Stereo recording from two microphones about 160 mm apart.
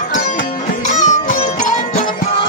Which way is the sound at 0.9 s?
50° left (ahead or behind).